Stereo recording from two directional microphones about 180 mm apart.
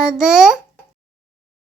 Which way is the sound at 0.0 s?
5° right (ahead or behind).